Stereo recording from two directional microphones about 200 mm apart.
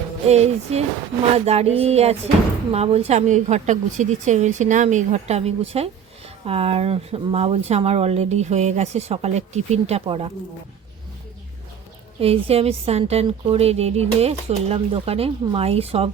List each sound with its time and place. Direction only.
0.3 s speech: 30° right (ahead or behind)
12.2 s speech: 30° right (ahead or behind)